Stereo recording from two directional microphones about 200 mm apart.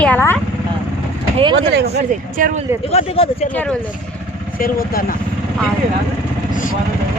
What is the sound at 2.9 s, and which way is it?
Speech, 30° left (ahead or behind).